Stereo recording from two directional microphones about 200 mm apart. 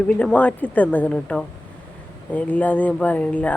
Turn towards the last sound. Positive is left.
turn(degrees=5)  # may be behind; listen again after turning